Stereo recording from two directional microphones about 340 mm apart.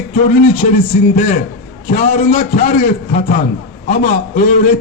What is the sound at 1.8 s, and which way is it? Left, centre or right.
A man's voice, left.